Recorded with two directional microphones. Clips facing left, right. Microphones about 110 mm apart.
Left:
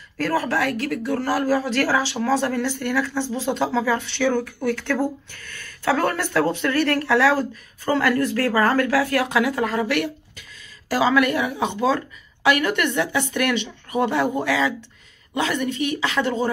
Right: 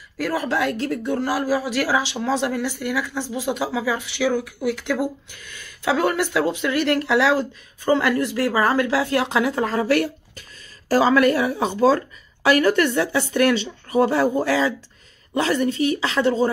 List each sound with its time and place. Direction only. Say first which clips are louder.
0.2 s speech: even; 15° right (ahead or behind)